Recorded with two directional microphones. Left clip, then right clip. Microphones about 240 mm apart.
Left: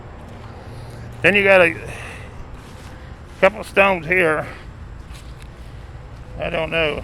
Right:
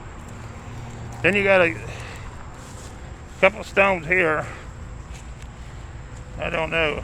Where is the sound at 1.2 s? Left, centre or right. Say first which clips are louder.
Left 5 dB; centre.